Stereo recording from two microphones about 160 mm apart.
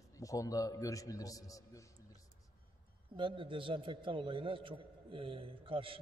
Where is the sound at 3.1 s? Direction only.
30° right (ahead or behind).